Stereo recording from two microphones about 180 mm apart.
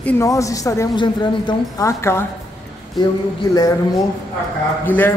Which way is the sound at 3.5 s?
20° left (ahead or behind).